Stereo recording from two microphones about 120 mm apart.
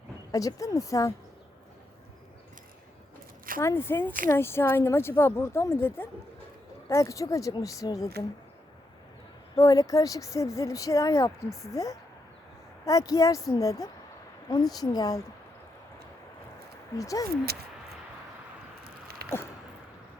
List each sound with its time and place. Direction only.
0.3 s speech: 30° left (ahead or behind)
3.6 s speech: 20° left (ahead or behind)
9.6 s a woman's voice: 30° left (ahead or behind)
17.0 s speech: 30° left (ahead or behind)